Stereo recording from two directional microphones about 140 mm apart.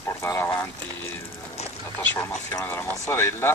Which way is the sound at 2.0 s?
15° left (ahead or behind).